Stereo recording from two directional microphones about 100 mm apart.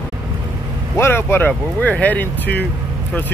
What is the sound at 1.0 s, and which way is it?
Speech, 25° left (ahead or behind).